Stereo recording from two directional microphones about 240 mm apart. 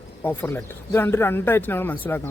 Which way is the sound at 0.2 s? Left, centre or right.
Centre.